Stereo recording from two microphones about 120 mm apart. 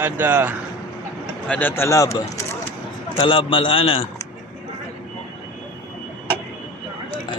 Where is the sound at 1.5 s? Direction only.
15° left (ahead or behind).